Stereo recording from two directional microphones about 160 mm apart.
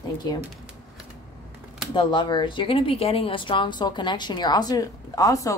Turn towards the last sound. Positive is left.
turn(degrees=20)  # may be behind; listen again after turning